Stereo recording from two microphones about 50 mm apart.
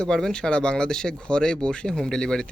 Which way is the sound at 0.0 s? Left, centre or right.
Centre.